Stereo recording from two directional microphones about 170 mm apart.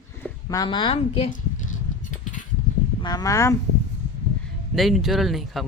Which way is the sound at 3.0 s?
25° left (ahead or behind).